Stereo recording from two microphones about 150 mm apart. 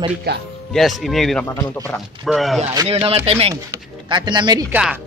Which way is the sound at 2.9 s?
40° right (ahead or behind).